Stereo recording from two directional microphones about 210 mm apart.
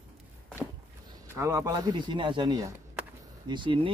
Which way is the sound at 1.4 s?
15° right (ahead or behind).